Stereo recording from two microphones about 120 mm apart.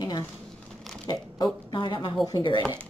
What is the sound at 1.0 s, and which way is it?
Speech, 40° left (ahead or behind).